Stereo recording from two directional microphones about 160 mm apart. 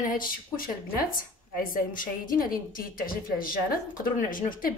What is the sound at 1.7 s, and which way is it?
Speech, 60° left (ahead or behind).